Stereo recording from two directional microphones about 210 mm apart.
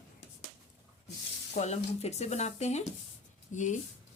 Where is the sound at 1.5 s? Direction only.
30° left (ahead or behind).